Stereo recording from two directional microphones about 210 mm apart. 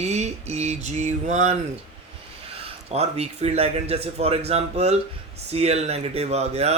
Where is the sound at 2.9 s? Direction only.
30° right (ahead or behind).